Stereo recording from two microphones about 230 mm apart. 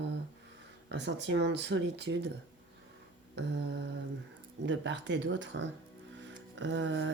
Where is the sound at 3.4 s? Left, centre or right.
Right.